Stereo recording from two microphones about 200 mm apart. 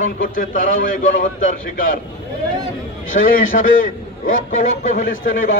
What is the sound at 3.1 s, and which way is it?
Speech, 85° left.